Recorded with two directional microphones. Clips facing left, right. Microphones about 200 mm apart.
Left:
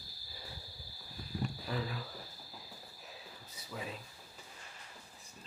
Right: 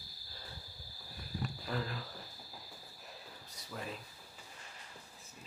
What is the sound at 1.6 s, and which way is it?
Speech, 5° left (ahead or behind).